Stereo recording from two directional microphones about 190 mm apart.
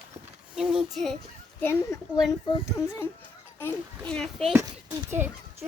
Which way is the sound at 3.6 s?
5° left (ahead or behind).